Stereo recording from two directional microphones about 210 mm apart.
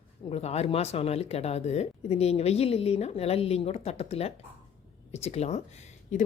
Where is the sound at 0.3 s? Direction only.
30° left (ahead or behind).